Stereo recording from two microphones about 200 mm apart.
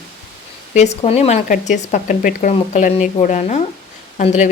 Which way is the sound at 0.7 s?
35° left (ahead or behind).